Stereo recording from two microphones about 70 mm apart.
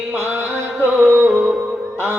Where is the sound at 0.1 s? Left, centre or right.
Right.